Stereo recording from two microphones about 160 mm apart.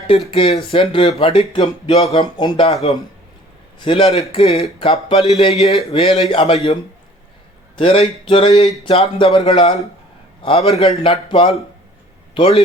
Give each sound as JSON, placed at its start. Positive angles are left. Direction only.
{"t": 0.3, "sound": "speech", "side_deg": 35}
{"t": 7.8, "sound": "a man's voice", "side_deg": 40}